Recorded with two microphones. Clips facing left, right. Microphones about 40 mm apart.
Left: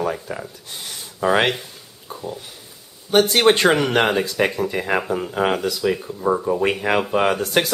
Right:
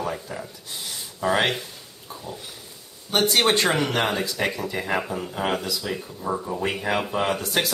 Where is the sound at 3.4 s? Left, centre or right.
Left.